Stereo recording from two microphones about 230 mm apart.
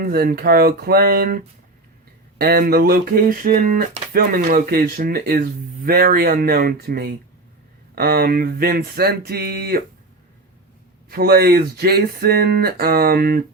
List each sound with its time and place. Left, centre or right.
0.0 s speech: right
2.4 s speech: right
11.1 s speech: right